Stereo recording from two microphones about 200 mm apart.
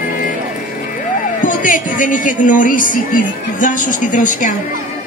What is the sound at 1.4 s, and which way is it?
A woman's voice, 40° left (ahead or behind).